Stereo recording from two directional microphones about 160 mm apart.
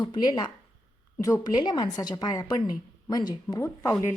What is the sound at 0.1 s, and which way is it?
Speech, 30° left (ahead or behind).